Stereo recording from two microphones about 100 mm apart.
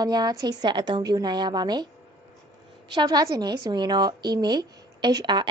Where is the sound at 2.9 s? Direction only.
40° right (ahead or behind).